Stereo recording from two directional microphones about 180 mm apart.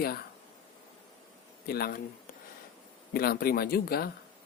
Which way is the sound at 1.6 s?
60° left (ahead or behind).